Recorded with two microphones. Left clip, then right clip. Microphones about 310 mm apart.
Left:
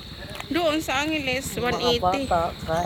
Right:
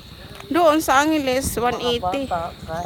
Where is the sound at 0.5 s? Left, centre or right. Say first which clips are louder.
Right 8 dB; centre.